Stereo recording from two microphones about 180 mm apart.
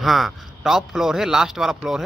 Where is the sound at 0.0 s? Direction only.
Centre (ahead or behind).